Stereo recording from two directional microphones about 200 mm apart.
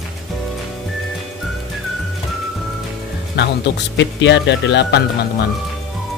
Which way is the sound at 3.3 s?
60° left (ahead or behind).